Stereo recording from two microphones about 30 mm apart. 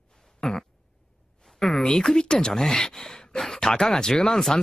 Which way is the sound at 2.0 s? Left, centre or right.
Left.